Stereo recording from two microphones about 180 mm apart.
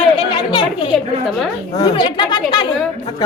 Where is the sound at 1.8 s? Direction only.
25° left (ahead or behind).